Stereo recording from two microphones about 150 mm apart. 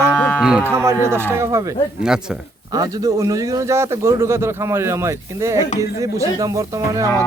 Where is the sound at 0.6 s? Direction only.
20° right (ahead or behind).